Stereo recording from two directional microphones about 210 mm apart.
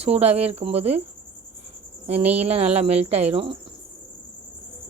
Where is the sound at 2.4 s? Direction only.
30° right (ahead or behind).